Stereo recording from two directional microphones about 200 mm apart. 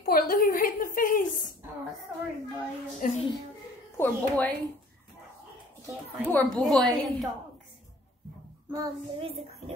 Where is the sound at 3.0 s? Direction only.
40° left (ahead or behind).